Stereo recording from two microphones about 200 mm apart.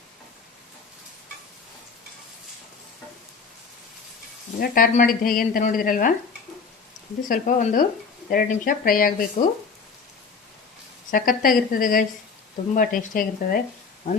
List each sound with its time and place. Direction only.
4.6 s speech: 45° left (ahead or behind)
7.2 s speech: 40° left (ahead or behind)
11.1 s speech: 45° left (ahead or behind)